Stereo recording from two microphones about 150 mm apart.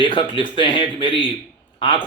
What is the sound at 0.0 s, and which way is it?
A man's voice, 35° left (ahead or behind).